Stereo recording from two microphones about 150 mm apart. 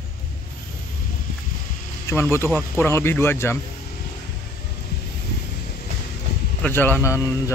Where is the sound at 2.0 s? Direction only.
15° left (ahead or behind).